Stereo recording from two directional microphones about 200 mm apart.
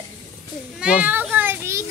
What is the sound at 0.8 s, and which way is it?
Children playing, 5° right (ahead or behind).